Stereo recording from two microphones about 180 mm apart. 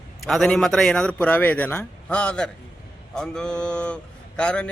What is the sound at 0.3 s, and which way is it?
A man's voice, 5° left (ahead or behind).